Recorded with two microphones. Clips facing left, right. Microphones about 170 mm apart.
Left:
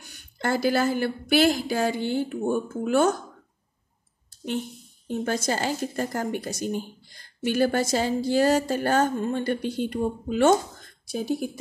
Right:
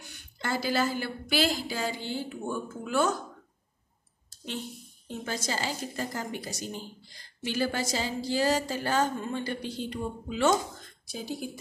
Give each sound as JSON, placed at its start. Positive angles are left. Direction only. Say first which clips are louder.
{"t": 0.0, "sound": "a woman's voice", "louder": "left 7 dB", "side_deg": 50}
{"t": 4.5, "sound": "a woman's voice", "louder": "left 7 dB", "side_deg": 55}